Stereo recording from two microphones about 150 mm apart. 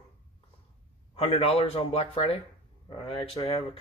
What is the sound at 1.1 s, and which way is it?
Speech, 40° left (ahead or behind).